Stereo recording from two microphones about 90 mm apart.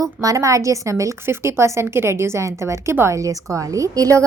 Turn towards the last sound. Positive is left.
turn(degrees=-40)  # may be behind; listen again after turning